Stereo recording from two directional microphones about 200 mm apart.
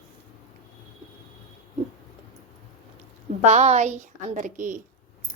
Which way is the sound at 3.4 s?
35° right (ahead or behind).